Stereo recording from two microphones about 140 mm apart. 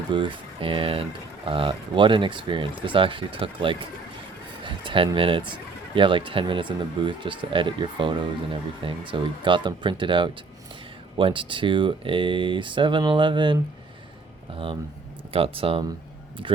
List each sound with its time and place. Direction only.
0.1 s speech: 35° right (ahead or behind)